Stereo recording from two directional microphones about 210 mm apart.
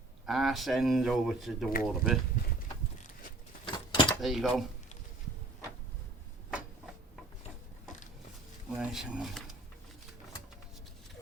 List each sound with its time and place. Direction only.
0.3 s speech: centre (ahead or behind)
3.7 s a sound: 20° left (ahead or behind)
4.2 s speech: centre (ahead or behind)
8.8 s speech: 5° right (ahead or behind)